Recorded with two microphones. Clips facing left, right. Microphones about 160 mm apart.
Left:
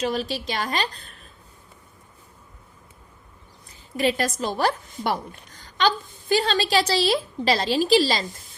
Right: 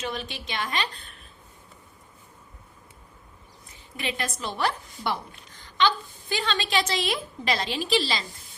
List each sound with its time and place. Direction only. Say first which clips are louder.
0.0 s a woman's voice: left 8 dB; 35° left (ahead or behind)
3.9 s a woman's voice: left 9 dB; 40° left (ahead or behind)